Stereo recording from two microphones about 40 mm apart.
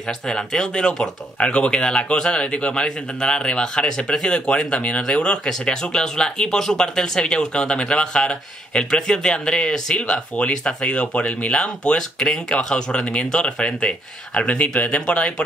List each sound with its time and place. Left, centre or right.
0.3 s speech: centre
1.4 s speech: left